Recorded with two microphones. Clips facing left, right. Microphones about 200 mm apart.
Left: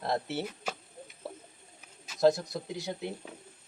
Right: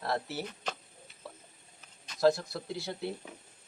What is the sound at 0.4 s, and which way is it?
Speech, 10° left (ahead or behind).